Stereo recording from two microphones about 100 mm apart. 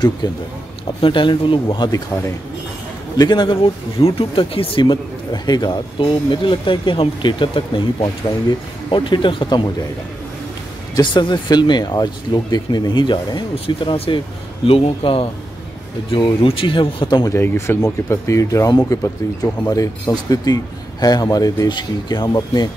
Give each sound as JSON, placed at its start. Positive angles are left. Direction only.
{"t": 0.2, "sound": "speech", "side_deg": 50}
{"t": 3.2, "sound": "speech", "side_deg": 50}
{"t": 11.0, "sound": "speech", "side_deg": 50}
{"t": 16.1, "sound": "speech", "side_deg": 60}
{"t": 17.2, "sound": "a man's voice", "side_deg": 25}